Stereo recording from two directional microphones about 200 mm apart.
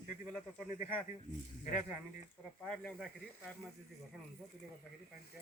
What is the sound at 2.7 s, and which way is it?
Speech, centre (ahead or behind).